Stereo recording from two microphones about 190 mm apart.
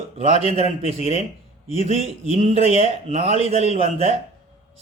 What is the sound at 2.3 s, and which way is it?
A man's voice, 35° right (ahead or behind).